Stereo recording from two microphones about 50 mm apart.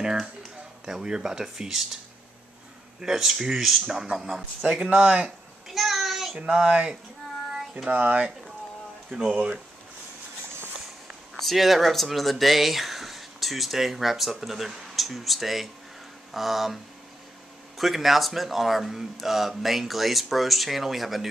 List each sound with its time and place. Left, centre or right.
0.0 s speech: centre
3.0 s speech: centre
4.6 s speech: right
5.7 s child singing: centre
6.3 s speech: centre
7.9 s speech: right
9.1 s speech: centre
11.3 s speech: centre